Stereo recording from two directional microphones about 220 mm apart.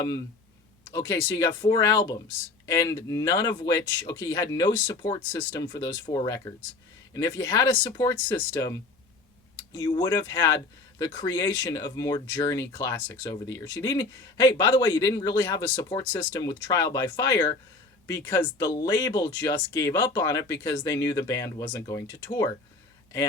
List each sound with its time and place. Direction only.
0.9 s speech: 15° left (ahead or behind)